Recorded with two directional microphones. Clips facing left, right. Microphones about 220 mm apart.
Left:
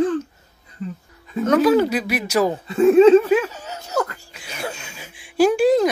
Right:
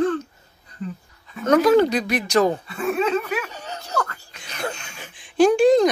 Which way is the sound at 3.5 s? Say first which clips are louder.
Even; 5° left (ahead or behind).